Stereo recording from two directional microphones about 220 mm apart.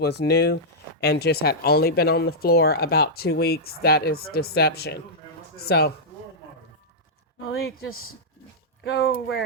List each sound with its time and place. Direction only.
0.0 s speech: 50° left (ahead or behind)
7.4 s speech: 70° left (ahead or behind)
8.8 s speech: 50° left (ahead or behind)